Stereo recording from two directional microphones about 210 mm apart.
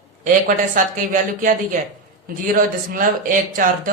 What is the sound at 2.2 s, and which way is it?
Speech, 40° right (ahead or behind).